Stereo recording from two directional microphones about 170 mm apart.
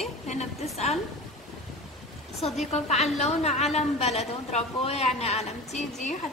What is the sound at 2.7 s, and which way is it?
A woman's voice, 40° left (ahead or behind).